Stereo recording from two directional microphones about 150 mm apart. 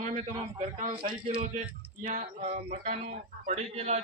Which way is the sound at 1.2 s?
40° right (ahead or behind).